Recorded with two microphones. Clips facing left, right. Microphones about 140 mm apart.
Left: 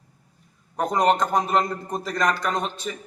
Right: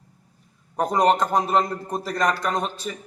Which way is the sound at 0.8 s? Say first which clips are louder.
Right 1 dB; 5° right (ahead or behind).